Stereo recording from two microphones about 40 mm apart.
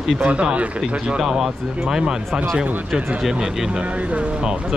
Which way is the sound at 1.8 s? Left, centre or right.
Centre.